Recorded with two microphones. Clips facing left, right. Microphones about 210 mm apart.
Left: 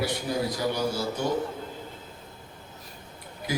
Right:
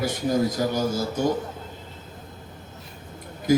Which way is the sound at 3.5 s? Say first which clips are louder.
Right 11 dB; 45° right (ahead or behind).